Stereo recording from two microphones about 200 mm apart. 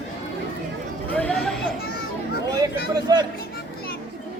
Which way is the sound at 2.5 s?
20° right (ahead or behind).